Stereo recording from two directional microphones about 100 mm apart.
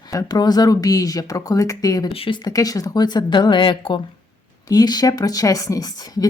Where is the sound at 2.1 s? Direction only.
65° left (ahead or behind).